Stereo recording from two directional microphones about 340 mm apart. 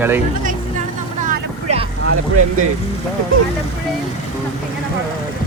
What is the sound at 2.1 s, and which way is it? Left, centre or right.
Speech, right.